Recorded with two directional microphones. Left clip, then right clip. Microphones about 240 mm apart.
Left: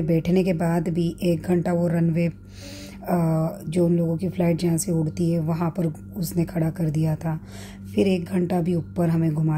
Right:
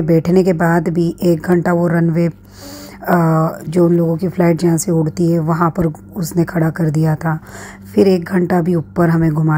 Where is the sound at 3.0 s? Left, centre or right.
Centre.